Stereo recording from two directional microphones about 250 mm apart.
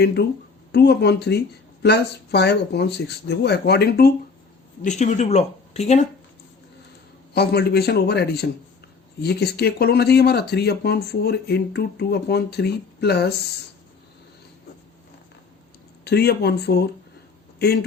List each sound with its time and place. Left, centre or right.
0.2 s speech: left
4.8 s speech: left
7.3 s speech: left
16.0 s speech: left